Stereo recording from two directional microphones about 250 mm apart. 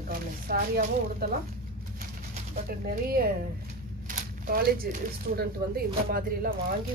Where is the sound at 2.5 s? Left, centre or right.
Right.